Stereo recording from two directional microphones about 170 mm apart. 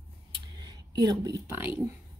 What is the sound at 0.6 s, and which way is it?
Speech, 20° right (ahead or behind).